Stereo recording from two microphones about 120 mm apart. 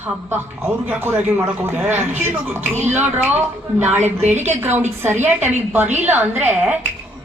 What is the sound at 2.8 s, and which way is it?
A man's voice, 15° right (ahead or behind).